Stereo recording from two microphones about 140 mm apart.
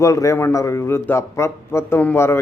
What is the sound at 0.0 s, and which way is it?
A man's voice, 20° left (ahead or behind).